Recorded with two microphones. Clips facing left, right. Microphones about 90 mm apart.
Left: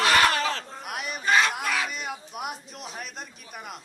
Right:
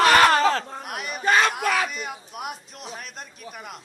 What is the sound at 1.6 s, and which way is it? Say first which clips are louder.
Speech: right 5 dB; 50° right (ahead or behind).